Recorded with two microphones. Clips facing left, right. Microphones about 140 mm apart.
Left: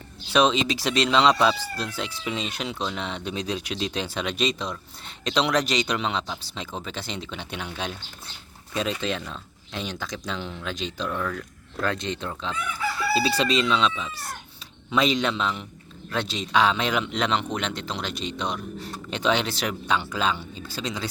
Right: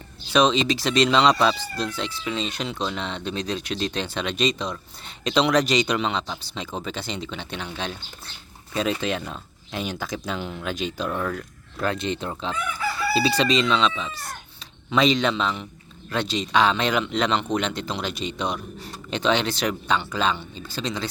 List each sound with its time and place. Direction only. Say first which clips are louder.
0.3 s speech: right 1 dB; 5° left (ahead or behind)
11.1 s speech: even; 25° right (ahead or behind)
11.3 s speech: right 1 dB; 10° right (ahead or behind); by 21.1 s 10° left (ahead or behind)